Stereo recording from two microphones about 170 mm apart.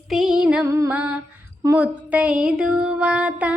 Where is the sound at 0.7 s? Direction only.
15° right (ahead or behind).